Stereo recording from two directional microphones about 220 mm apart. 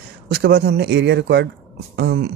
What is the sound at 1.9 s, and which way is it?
Throat clearing, 45° right (ahead or behind).